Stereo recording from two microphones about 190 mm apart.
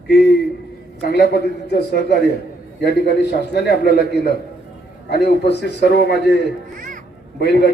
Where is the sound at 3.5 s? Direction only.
60° left (ahead or behind).